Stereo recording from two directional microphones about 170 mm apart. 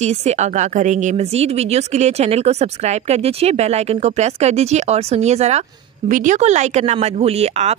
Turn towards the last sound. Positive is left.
turn(degrees=-40)  # may be behind; listen again after turning